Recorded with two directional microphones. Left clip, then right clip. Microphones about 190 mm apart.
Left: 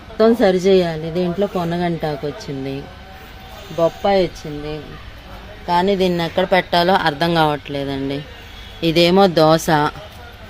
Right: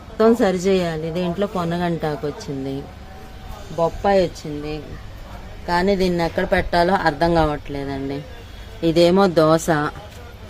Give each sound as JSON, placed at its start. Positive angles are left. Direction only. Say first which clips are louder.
{"t": 0.2, "sound": "a woman's voice", "louder": "left 3 dB", "side_deg": 30}
{"t": 3.8, "sound": "a woman's voice", "louder": "left 2 dB", "side_deg": 40}